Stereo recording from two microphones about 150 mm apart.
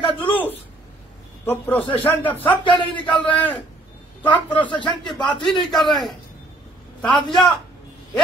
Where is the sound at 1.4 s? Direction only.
10° left (ahead or behind).